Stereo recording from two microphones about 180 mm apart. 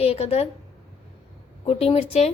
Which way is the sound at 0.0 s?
35° left (ahead or behind).